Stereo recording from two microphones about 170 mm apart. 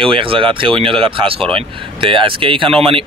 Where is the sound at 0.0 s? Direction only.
30° right (ahead or behind).